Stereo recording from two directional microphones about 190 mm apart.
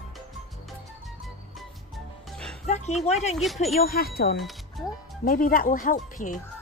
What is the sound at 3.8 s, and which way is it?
Speech, 50° left (ahead or behind).